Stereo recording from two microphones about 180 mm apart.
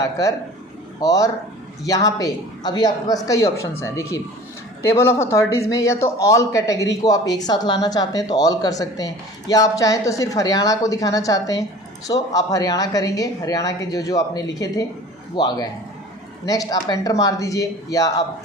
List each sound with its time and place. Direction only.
0.0 s speech: 20° left (ahead or behind)